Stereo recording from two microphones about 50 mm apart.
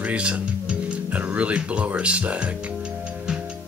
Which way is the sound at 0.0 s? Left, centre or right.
Right.